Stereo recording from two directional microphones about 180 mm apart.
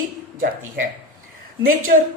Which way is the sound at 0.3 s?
50° right (ahead or behind).